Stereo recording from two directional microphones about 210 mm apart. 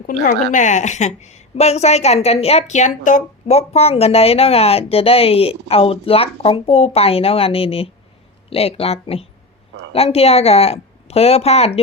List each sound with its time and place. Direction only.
0.5 s a woman's voice: 35° left (ahead or behind)